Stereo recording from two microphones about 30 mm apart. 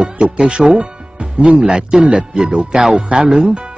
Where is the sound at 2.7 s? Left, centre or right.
Centre.